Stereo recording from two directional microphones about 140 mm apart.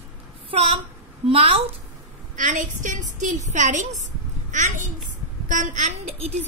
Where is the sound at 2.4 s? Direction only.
65° right (ahead or behind).